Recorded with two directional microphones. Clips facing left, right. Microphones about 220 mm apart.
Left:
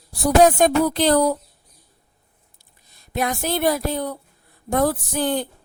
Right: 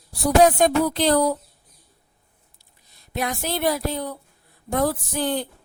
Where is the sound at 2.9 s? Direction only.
50° left (ahead or behind).